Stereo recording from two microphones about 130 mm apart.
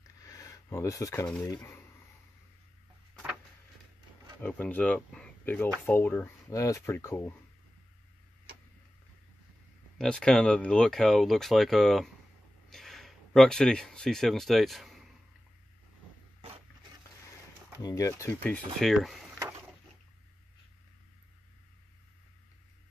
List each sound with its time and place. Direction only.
0.2 s a sound: 25° left (ahead or behind)
1.4 s speech: 25° left (ahead or behind)
4.4 s speech: 15° left (ahead or behind)
9.9 s speech: 5° left (ahead or behind)
17.8 s speech: 25° left (ahead or behind)
18.8 s speech: centre (ahead or behind)